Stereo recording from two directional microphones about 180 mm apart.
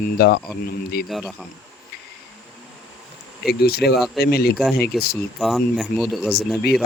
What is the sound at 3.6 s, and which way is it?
Speech, 60° left (ahead or behind).